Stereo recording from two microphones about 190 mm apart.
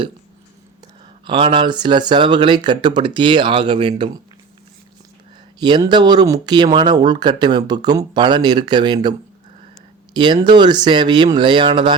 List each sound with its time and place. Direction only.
1.2 s speech: 30° right (ahead or behind)
5.5 s speech: 25° right (ahead or behind)
10.2 s speech: 25° right (ahead or behind)